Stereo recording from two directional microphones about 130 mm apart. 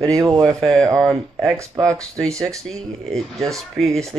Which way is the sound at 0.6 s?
5° left (ahead or behind).